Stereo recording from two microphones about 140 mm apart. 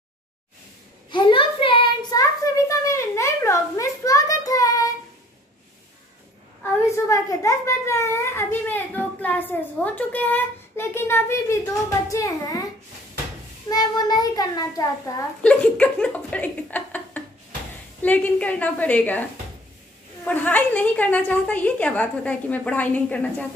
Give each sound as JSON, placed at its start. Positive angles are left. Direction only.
{"t": 1.1, "sound": "a child's voice", "side_deg": 35}
{"t": 2.7, "sound": "a sound", "side_deg": 20}
{"t": 6.9, "sound": "a child's voice", "side_deg": 25}
{"t": 13.7, "sound": "a child's voice", "side_deg": 30}
{"t": 15.4, "sound": "a child's voice", "side_deg": 10}
{"t": 20.2, "sound": "a child's voice", "side_deg": 10}